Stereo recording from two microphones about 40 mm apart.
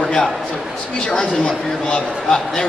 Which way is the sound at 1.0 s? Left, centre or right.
Left.